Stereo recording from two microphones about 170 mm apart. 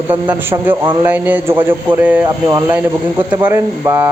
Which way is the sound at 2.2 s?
20° right (ahead or behind).